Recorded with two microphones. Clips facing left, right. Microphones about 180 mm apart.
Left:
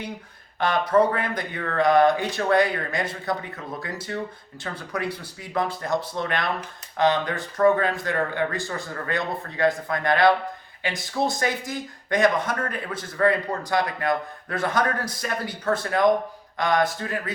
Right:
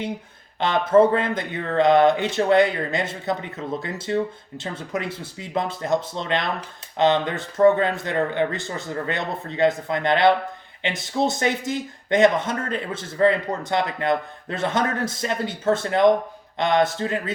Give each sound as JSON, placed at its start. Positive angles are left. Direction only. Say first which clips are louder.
{"t": 0.6, "sound": "speech", "louder": "right 3 dB", "side_deg": -25}